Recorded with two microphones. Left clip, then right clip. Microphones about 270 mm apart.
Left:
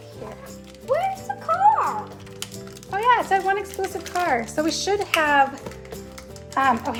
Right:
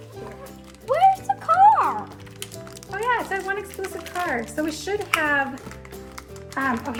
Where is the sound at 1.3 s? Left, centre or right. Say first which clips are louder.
Right 6 dB; right.